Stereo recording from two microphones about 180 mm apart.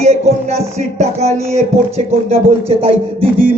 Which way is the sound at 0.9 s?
35° right (ahead or behind).